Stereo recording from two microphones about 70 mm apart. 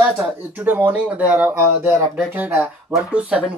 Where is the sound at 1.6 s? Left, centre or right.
Right.